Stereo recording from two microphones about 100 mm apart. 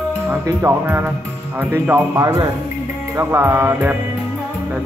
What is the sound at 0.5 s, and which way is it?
Speech, 25° right (ahead or behind).